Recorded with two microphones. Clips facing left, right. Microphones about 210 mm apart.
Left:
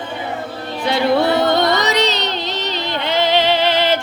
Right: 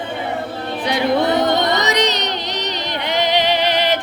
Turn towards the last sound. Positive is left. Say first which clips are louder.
# left 2 dB
turn(degrees=-15)  # may be behind; listen again after turning